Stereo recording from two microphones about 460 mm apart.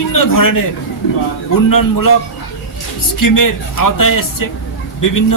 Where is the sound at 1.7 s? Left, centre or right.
Left.